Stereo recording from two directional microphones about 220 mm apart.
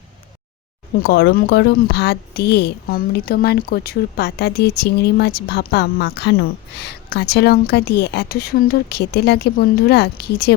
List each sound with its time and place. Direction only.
1.0 s a woman's voice: 45° left (ahead or behind)